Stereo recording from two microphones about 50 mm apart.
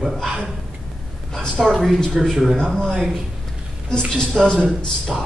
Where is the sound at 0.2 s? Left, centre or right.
Centre.